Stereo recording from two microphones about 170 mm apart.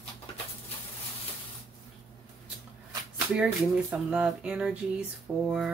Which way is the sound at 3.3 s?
5° right (ahead or behind).